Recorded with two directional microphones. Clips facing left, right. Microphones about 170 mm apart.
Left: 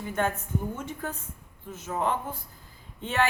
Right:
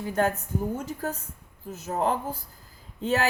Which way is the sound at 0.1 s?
35° right (ahead or behind).